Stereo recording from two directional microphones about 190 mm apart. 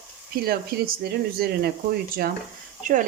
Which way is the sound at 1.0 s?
55° right (ahead or behind).